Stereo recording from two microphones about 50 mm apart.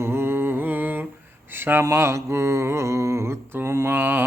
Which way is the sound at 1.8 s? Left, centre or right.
Right.